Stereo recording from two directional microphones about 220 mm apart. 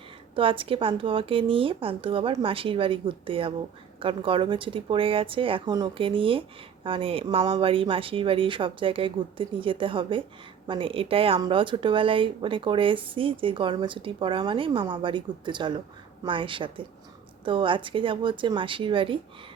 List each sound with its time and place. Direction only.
0.3 s speech: 25° right (ahead or behind)